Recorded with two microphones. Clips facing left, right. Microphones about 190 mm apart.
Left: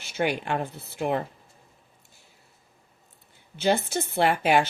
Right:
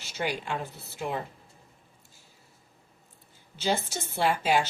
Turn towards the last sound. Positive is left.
turn(degrees=60)  # may be behind; listen again after turning